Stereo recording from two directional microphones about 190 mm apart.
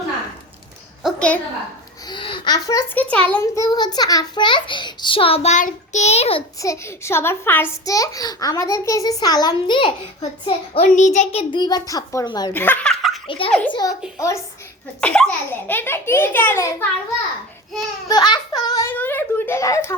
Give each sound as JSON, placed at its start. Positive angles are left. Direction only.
{"t": 1.0, "sound": "a sound", "side_deg": 5}
{"t": 2.0, "sound": "a child's voice", "side_deg": 25}
{"t": 3.4, "sound": "a child's voice", "side_deg": 15}
{"t": 6.6, "sound": "a child's voice", "side_deg": 15}
{"t": 10.9, "sound": "a child's voice", "side_deg": 40}
{"t": 12.5, "sound": "giggle", "side_deg": 10}
{"t": 13.2, "sound": "a child's voice", "side_deg": 30}
{"t": 13.5, "sound": "a child's voice", "side_deg": 5}
{"t": 18.1, "sound": "a child's voice", "side_deg": 20}